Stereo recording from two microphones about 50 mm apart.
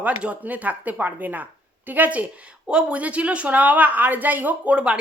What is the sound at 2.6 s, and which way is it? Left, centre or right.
A woman's voice, right.